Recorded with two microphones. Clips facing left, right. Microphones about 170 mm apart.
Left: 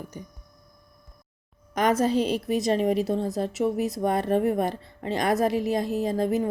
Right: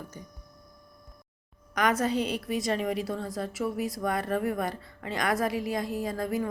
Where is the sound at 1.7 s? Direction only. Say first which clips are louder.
Left 4 dB; 25° left (ahead or behind).